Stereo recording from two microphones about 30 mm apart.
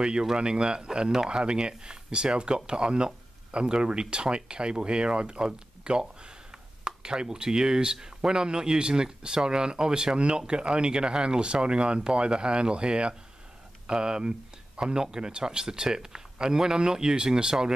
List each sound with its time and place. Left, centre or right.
0.0 s speech: right